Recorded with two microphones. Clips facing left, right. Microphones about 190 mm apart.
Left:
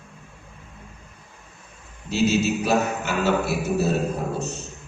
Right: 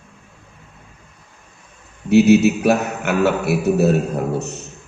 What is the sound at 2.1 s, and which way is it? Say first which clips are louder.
A man's voice: right 9 dB; 65° right (ahead or behind).